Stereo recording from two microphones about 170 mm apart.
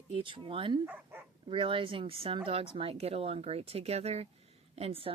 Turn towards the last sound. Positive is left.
turn(degrees=-35)  # may be behind; listen again after turning